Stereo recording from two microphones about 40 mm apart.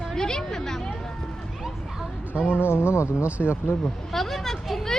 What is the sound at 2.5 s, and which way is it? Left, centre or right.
Speech, left.